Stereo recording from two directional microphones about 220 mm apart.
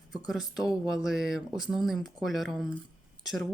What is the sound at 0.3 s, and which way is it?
Speech, centre (ahead or behind).